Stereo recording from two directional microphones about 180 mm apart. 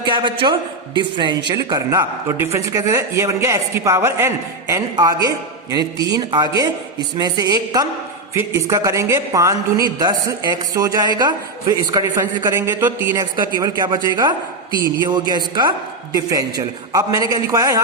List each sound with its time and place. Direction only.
0.0 s a man's voice: 25° right (ahead or behind); by 13.2 s 10° right (ahead or behind)
13.4 s a man's voice: 20° right (ahead or behind)